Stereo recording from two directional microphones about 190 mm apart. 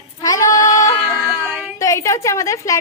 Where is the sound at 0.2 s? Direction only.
20° left (ahead or behind).